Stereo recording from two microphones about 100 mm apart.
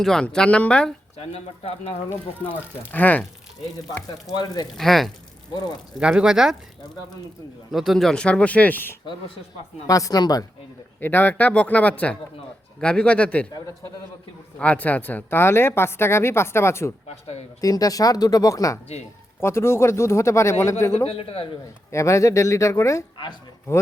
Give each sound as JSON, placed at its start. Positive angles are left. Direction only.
{"t": 0.0, "sound": "speech", "side_deg": 5}
{"t": 1.1, "sound": "speech", "side_deg": 90}
{"t": 2.9, "sound": "speech", "side_deg": 15}
{"t": 4.1, "sound": "speech", "side_deg": 40}
{"t": 4.8, "sound": "speech", "side_deg": 0}
{"t": 6.0, "sound": "speech", "side_deg": -10}
{"t": 7.7, "sound": "speech", "side_deg": 0}
{"t": 9.8, "sound": "speech", "side_deg": 35}
{"t": 11.0, "sound": "speech", "side_deg": 20}
{"t": 14.6, "sound": "speech", "side_deg": 15}
{"t": 17.6, "sound": "speech", "side_deg": 35}
{"t": 20.9, "sound": "a man's voice", "side_deg": 75}
{"t": 21.9, "sound": "speech", "side_deg": 30}
{"t": 23.1, "sound": "speech", "side_deg": 50}